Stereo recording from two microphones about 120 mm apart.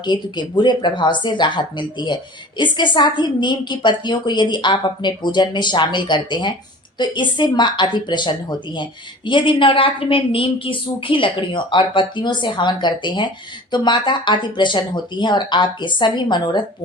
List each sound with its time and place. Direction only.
0.0 s a woman's voice: 40° left (ahead or behind)